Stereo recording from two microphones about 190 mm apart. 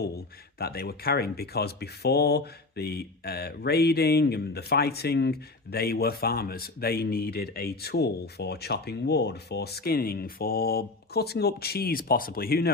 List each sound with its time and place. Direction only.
0.6 s speech: 55° left (ahead or behind)